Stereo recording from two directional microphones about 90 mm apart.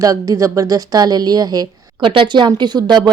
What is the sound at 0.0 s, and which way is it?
Speech, 40° right (ahead or behind).